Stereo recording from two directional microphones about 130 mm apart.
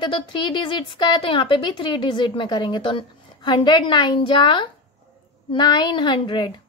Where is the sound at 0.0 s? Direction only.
35° left (ahead or behind).